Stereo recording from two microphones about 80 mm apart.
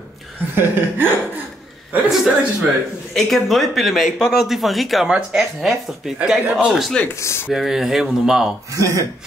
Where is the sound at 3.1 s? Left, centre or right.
Centre.